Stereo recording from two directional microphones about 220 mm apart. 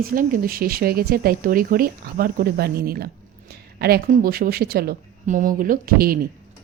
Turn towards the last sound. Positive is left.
turn(degrees=-40)  # may be behind; listen again after turning